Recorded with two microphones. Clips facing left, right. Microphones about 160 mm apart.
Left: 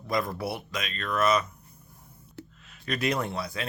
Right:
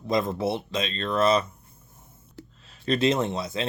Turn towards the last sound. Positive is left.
turn(degrees=-20)  # may be behind; listen again after turning